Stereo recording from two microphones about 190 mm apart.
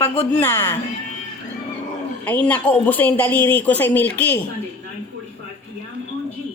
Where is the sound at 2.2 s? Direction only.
10° left (ahead or behind).